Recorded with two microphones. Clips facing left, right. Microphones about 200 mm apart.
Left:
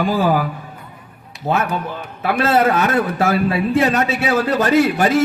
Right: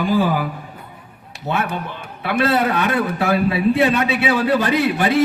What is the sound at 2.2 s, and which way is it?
A man's voice, 45° left (ahead or behind).